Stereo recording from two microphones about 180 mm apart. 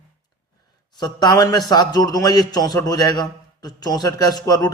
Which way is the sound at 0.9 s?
20° left (ahead or behind).